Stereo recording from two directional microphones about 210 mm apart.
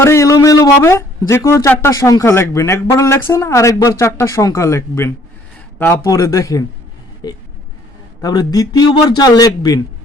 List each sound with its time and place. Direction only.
0.0 s speech: 15° left (ahead or behind)
7.2 s a sound: 20° left (ahead or behind)
8.2 s speech: 20° left (ahead or behind)